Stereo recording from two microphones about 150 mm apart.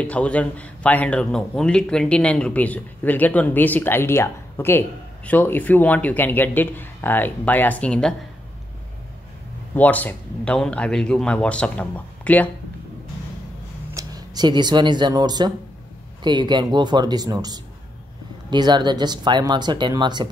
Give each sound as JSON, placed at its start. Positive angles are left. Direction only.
{"t": 0.0, "sound": "speech", "side_deg": 10}
{"t": 9.8, "sound": "speech", "side_deg": 10}
{"t": 13.9, "sound": "speech", "side_deg": -25}